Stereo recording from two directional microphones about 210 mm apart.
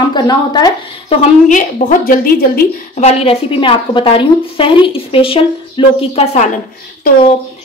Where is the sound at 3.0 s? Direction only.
30° left (ahead or behind).